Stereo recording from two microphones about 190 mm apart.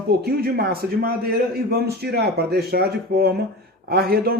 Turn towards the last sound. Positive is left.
turn(degrees=-55)  # may be behind; listen again after turning